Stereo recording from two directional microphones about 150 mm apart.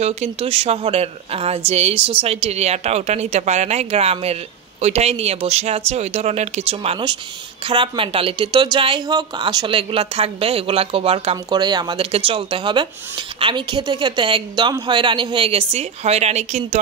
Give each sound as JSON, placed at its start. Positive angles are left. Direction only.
{"t": 0.0, "sound": "speech", "side_deg": -45}